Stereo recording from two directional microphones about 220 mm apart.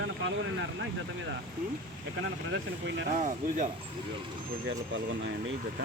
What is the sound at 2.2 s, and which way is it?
Speech, 60° right (ahead or behind).